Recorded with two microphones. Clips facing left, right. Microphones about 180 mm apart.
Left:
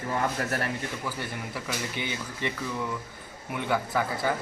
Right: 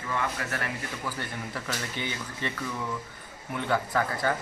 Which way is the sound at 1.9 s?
15° left (ahead or behind).